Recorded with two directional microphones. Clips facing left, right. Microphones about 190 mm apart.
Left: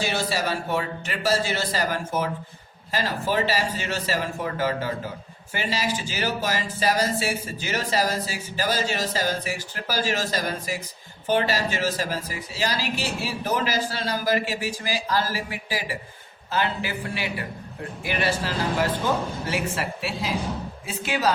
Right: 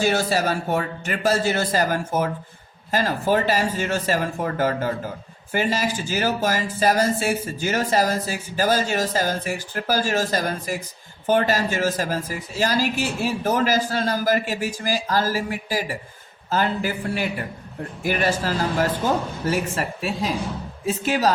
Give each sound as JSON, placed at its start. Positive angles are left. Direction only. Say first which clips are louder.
{"t": 0.0, "sound": "speech", "louder": "right 5 dB", "side_deg": -45}